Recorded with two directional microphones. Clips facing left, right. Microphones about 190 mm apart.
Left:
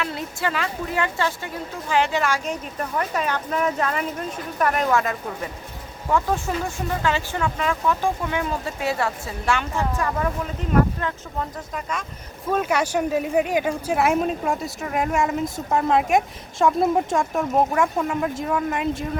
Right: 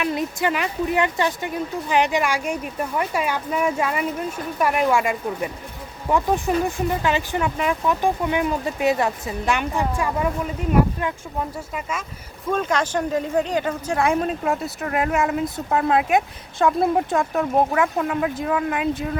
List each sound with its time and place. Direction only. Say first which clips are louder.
0.0 s speech: right 4 dB; 15° right (ahead or behind)
12.5 s speech: even; 5° left (ahead or behind)